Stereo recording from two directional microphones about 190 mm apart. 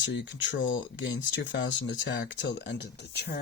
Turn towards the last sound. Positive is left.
turn(degrees=60)  # may be behind; listen again after turning